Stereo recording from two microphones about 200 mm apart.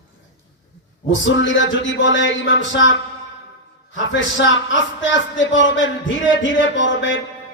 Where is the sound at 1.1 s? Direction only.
70° left (ahead or behind).